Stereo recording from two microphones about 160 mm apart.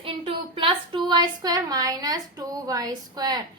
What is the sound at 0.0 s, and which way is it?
Speech, 35° right (ahead or behind).